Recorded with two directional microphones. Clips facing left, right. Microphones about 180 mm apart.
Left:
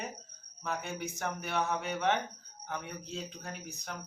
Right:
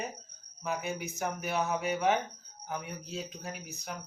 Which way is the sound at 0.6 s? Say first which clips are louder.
Right 2 dB; 5° right (ahead or behind).